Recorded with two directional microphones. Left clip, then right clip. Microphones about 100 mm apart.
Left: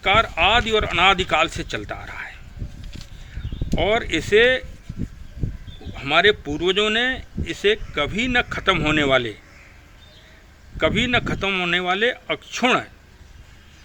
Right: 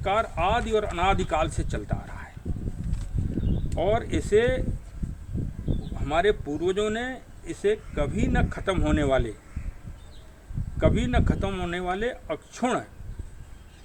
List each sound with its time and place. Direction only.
0.0 s speech: 50° left (ahead or behind)
3.8 s speech: 40° left (ahead or behind)
6.0 s speech: 45° left (ahead or behind)
10.8 s speech: 45° left (ahead or behind)